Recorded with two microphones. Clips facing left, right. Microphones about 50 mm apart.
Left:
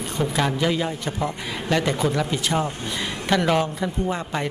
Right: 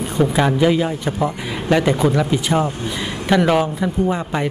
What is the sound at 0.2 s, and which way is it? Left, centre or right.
Speech, centre.